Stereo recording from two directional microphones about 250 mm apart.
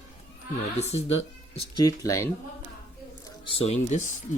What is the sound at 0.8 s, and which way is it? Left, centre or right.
Speech, left.